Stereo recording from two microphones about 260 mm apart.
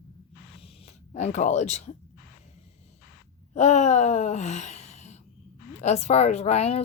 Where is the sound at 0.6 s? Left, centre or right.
Left.